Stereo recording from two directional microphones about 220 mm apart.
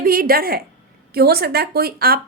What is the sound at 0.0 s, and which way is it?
A woman's voice, 40° right (ahead or behind).